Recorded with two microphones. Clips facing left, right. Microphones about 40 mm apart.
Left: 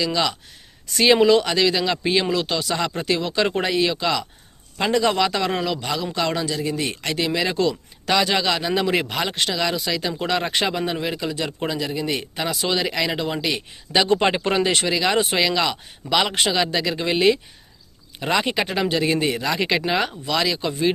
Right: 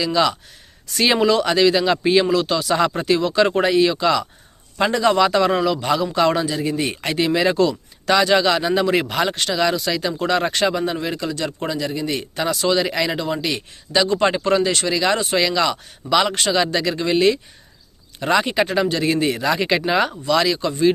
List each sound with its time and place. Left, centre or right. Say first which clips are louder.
0.0 s speech: right 4 dB; centre
10.5 s speech: right 3 dB; centre
13.1 s speech: right 1 dB; centre
14.4 s speech: right 2 dB; left
14.8 s speech: right 1 dB; centre
16.6 s speech: right 2 dB; centre